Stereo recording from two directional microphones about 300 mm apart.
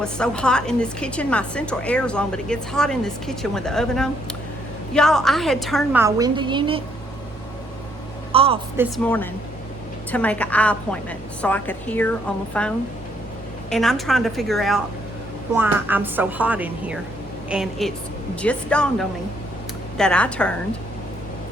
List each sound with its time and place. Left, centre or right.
0.0 s a woman's voice: centre
8.3 s a woman's voice: centre
9.0 s a woman's voice: centre